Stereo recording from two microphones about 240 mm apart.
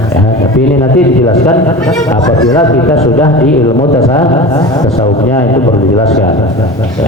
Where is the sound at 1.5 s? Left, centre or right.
Centre.